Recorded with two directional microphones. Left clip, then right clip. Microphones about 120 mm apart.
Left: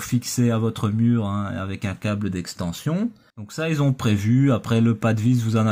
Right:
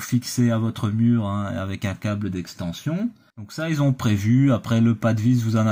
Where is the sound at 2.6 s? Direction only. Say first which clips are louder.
Left 2 dB; 40° left (ahead or behind).